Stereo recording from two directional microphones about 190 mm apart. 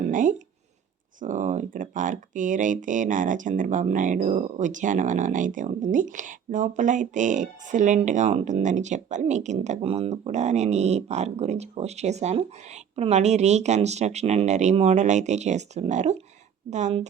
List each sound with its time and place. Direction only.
0.1 s speech: 45° right (ahead or behind)